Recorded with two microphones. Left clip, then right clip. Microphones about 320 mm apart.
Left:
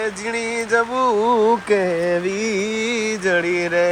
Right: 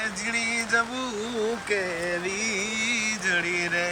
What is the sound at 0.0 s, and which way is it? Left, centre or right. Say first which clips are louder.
Music: left 4 dB; centre.